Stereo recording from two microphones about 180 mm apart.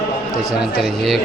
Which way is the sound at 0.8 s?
Centre (ahead or behind).